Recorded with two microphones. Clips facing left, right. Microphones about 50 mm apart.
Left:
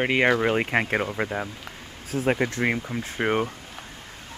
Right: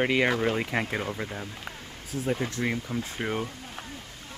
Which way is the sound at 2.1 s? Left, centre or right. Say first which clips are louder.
Left 6 dB; left.